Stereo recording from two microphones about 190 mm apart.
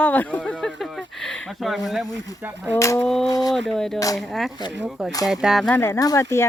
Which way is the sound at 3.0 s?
Centre (ahead or behind).